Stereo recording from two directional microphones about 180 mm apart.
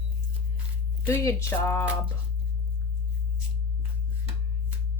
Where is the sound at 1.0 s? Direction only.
15° left (ahead or behind).